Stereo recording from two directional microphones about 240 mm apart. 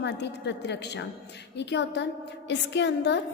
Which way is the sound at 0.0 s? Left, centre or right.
Left.